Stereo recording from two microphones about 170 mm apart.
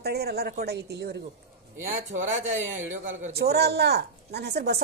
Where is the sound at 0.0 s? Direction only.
70° right (ahead or behind).